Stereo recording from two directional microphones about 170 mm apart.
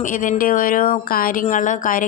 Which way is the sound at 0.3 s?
55° left (ahead or behind).